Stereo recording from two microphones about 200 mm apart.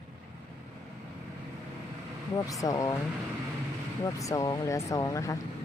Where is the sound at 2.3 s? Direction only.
15° left (ahead or behind).